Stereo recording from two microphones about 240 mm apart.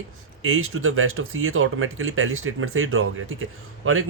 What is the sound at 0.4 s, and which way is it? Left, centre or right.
Speech, right.